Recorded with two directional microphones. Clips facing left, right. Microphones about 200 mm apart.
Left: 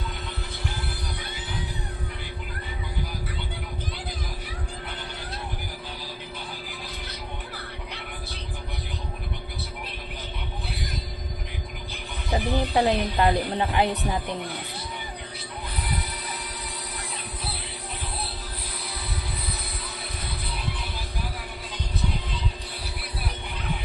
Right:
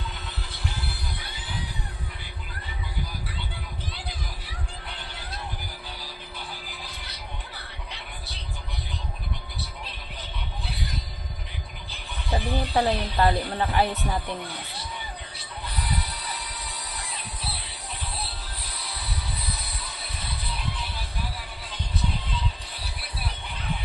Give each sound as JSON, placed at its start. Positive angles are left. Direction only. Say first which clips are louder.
{"t": 12.3, "sound": "speech", "louder": "left 2 dB", "side_deg": 20}